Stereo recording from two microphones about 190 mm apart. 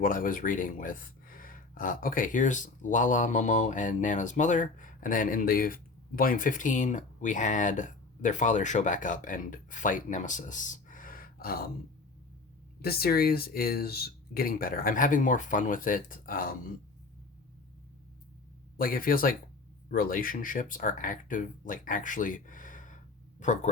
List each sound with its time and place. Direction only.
0.0 s speech: 45° left (ahead or behind)
12.8 s speech: 55° left (ahead or behind)
18.8 s speech: 50° left (ahead or behind)